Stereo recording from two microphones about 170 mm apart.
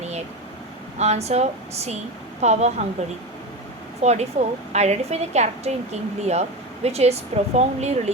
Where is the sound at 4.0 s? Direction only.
40° right (ahead or behind).